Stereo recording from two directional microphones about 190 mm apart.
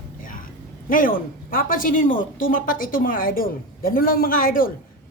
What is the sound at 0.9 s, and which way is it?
A woman's voice, 45° left (ahead or behind).